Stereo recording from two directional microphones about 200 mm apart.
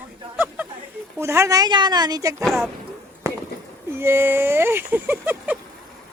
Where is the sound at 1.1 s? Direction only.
15° right (ahead or behind).